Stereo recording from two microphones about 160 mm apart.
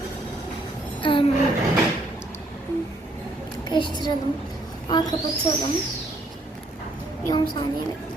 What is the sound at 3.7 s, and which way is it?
Speech, 30° left (ahead or behind).